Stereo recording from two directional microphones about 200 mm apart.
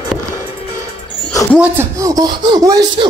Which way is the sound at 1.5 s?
10° right (ahead or behind).